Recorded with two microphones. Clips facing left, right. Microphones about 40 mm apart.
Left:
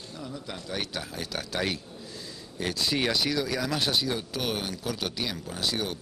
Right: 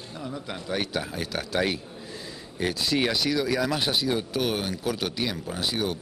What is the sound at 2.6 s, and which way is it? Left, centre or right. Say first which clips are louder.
A man's voice: right 3 dB; right.